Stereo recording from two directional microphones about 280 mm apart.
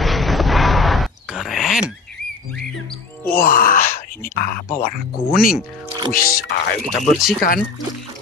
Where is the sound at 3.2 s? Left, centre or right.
Left.